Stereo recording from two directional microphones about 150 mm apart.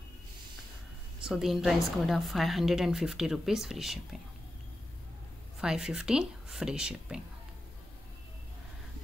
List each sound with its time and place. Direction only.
1.2 s a woman's voice: centre (ahead or behind)
5.6 s a woman's voice: 5° right (ahead or behind)